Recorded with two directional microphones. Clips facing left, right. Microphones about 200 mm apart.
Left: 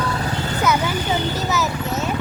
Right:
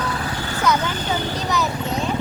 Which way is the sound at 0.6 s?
10° left (ahead or behind).